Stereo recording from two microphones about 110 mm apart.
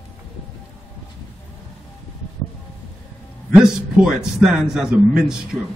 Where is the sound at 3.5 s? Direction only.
5° right (ahead or behind).